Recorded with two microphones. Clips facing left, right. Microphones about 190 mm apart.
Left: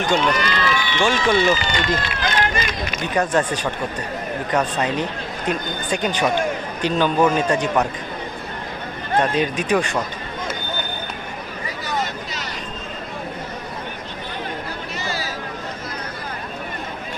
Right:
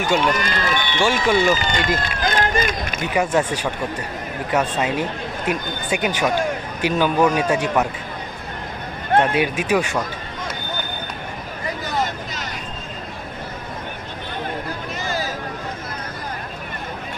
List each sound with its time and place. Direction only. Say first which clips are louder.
0.3 s run: even; 45° right (ahead or behind)
1.0 s speech: even; 10° right (ahead or behind)
1.5 s speech: right 1 dB; 45° right (ahead or behind)
3.0 s speech: even; 10° right (ahead or behind)
9.2 s speech: even; 10° right (ahead or behind)
15.0 s vehicle: right 3 dB; 50° right (ahead or behind)